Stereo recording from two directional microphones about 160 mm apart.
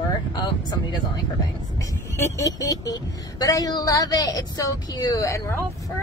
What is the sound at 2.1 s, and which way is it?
Speech, 20° left (ahead or behind).